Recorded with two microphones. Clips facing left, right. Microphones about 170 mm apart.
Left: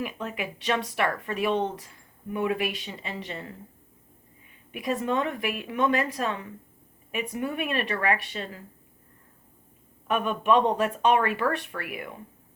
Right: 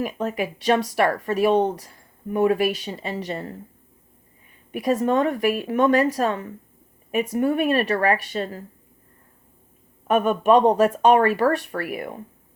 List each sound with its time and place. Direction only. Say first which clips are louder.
0.0 s speech: right 7 dB; 40° right (ahead or behind)
4.7 s speech: right 7 dB; 40° right (ahead or behind)
10.1 s speech: right 6 dB; 40° right (ahead or behind)